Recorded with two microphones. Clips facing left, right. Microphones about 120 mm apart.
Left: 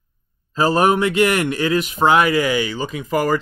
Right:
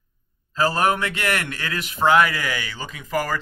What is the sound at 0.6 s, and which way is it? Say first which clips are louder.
A man's voice: left 5 dB; 20° left (ahead or behind).